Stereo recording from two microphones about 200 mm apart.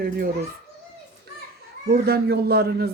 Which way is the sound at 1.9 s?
50° right (ahead or behind).